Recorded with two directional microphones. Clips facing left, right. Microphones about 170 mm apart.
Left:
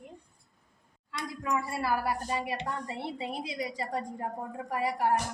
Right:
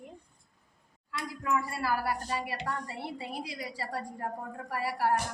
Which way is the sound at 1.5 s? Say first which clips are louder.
Even; 20° left (ahead or behind).